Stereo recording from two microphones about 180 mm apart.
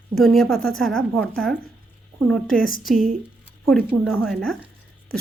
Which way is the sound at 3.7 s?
Centre (ahead or behind).